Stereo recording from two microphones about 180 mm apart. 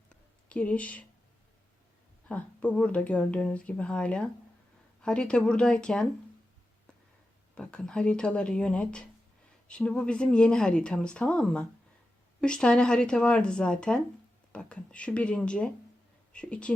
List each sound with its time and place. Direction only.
0.1 s a sound: 5° left (ahead or behind)
2.3 s speech: 10° left (ahead or behind)
7.5 s speech: 5° left (ahead or behind)